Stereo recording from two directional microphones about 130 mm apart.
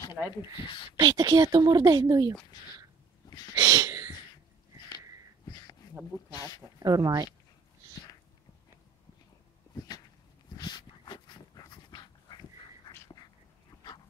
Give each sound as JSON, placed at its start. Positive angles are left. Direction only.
{"t": 0.4, "sound": "speech", "side_deg": 40}
{"t": 0.9, "sound": "a woman's voice", "side_deg": -30}
{"t": 3.3, "sound": "sneeze", "side_deg": 30}
{"t": 3.5, "sound": "a sound", "side_deg": -30}
{"t": 5.5, "sound": "a sound", "side_deg": 30}
{"t": 6.3, "sound": "speech", "side_deg": 30}
{"t": 6.8, "sound": "speech", "side_deg": -30}
{"t": 10.6, "sound": "dog", "side_deg": 35}